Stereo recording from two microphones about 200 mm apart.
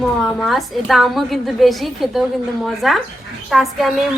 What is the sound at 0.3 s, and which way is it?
A woman's voice, centre (ahead or behind).